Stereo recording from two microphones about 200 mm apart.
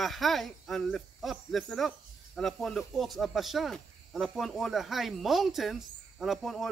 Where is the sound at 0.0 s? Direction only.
Centre (ahead or behind).